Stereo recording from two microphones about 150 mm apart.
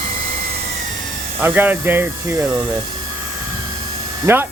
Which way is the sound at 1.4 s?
15° right (ahead or behind).